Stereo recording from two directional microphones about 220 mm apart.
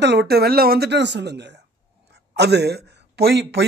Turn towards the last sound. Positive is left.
turn(degrees=-50)  # may be behind; listen again after turning